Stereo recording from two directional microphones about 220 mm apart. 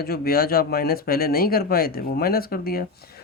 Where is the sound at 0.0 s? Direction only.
45° left (ahead or behind).